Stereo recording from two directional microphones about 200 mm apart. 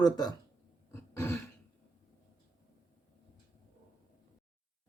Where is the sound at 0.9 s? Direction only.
15° left (ahead or behind).